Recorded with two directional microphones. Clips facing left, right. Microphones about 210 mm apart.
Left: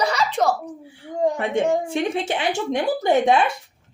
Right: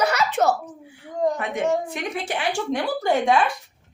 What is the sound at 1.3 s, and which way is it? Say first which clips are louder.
Speech: left 3 dB; 30° left (ahead or behind).